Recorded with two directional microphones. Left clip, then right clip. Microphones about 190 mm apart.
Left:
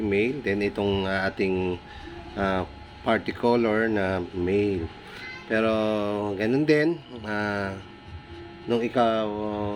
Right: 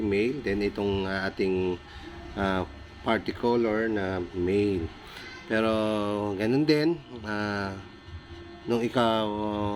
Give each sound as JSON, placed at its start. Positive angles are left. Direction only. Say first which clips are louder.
{"t": 0.1, "sound": "speech", "louder": "left 3 dB", "side_deg": 5}
{"t": 4.4, "sound": "speech", "louder": "left 1 dB", "side_deg": 5}